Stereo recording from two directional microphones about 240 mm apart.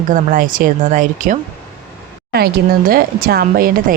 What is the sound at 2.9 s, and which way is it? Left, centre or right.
Speech, right.